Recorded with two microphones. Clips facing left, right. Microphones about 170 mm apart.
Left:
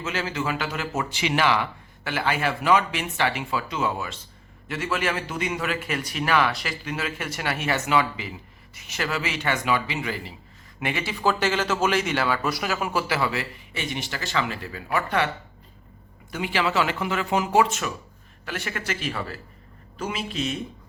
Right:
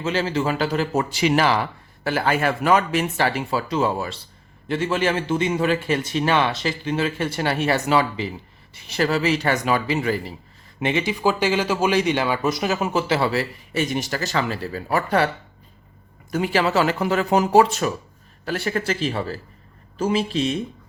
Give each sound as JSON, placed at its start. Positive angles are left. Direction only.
{"t": 0.0, "sound": "speech", "side_deg": -30}
{"t": 10.8, "sound": "speech", "side_deg": -20}
{"t": 16.3, "sound": "speech", "side_deg": -40}